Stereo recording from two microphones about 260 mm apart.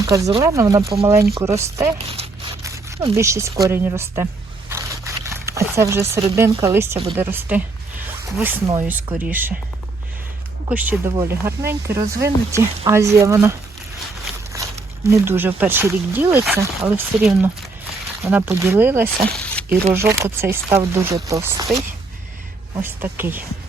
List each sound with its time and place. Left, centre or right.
0.0 s speech: centre
2.0 s crumpling: right
2.6 s speech: centre
4.7 s zipper: centre
6.3 s speech: centre
10.7 s speech: centre
22.8 s speech: centre